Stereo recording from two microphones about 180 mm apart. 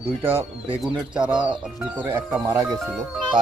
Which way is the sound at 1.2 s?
5° right (ahead or behind).